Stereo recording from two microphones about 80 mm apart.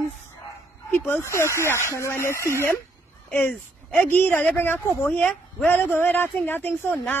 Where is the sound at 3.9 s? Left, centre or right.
Left.